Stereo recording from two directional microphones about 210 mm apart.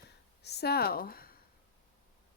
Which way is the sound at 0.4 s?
50° left (ahead or behind).